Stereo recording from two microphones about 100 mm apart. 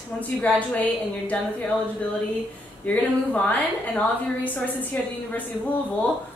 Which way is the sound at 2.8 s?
15° left (ahead or behind).